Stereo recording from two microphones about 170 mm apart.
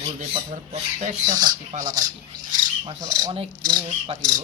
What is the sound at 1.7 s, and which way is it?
Speech, 50° right (ahead or behind).